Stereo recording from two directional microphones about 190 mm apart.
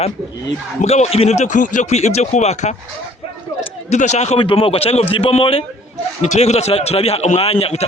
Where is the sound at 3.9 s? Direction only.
40° left (ahead or behind).